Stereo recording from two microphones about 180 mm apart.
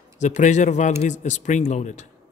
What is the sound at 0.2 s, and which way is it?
A man's voice, 40° left (ahead or behind).